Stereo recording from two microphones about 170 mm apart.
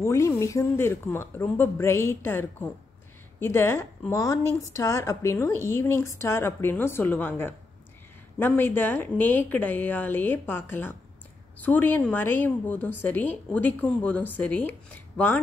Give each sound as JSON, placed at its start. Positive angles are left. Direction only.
{"t": 0.0, "sound": "a woman's voice", "side_deg": 15}